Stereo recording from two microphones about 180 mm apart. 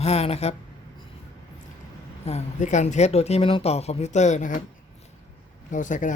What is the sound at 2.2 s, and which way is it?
Speech, 40° left (ahead or behind).